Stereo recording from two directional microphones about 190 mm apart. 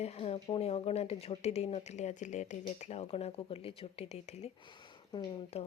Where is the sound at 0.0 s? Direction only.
35° left (ahead or behind).